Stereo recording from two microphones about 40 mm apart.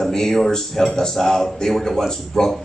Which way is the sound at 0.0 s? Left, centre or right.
Centre.